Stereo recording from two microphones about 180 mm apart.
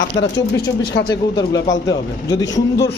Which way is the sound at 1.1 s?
25° left (ahead or behind).